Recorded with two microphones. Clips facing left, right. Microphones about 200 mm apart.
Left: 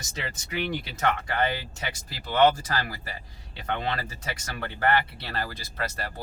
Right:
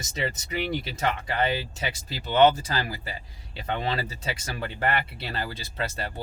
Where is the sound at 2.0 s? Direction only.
25° right (ahead or behind).